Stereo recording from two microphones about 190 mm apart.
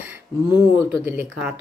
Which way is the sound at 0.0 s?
10° right (ahead or behind).